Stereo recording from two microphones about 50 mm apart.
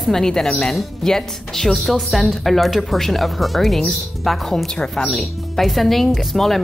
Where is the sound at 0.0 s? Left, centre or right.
Centre.